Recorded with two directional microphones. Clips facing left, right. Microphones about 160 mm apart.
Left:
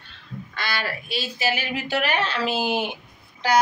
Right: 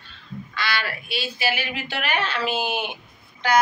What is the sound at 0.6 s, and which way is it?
A woman's voice, 45° left (ahead or behind).